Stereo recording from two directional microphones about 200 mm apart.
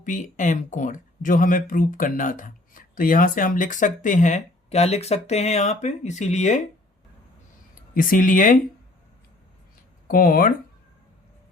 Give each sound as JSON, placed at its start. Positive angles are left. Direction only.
{"t": 0.0, "sound": "speech", "side_deg": 40}
{"t": 7.9, "sound": "speech", "side_deg": 40}
{"t": 10.1, "sound": "speech", "side_deg": 45}